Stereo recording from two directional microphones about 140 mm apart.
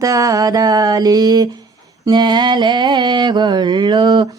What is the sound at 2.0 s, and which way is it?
Mantra, 30° right (ahead or behind).